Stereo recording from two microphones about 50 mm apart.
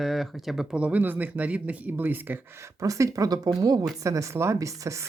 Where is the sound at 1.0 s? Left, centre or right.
Right.